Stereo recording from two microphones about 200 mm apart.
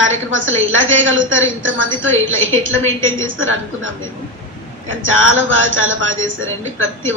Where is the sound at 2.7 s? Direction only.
10° left (ahead or behind).